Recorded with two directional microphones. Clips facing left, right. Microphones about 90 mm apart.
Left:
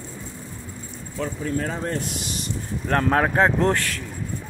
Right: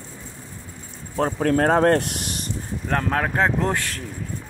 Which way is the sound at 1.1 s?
65° right (ahead or behind).